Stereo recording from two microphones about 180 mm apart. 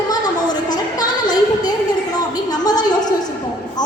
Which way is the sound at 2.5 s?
20° left (ahead or behind).